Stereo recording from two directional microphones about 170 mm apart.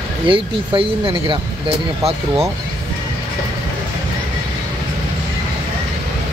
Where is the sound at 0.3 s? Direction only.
30° right (ahead or behind).